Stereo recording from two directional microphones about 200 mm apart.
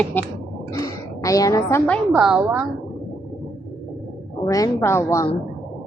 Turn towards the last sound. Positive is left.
turn(degrees=15)  # may be behind; listen again after turning